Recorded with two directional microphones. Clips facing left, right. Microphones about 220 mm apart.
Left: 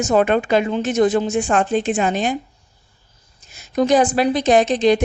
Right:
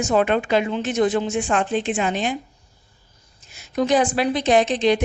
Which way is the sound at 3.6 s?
40° left (ahead or behind).